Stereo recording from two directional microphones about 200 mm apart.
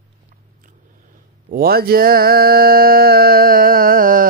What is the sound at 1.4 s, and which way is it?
Mantra, 50° right (ahead or behind).